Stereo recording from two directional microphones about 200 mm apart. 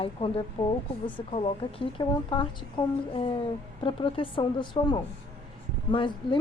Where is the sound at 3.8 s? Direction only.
25° left (ahead or behind).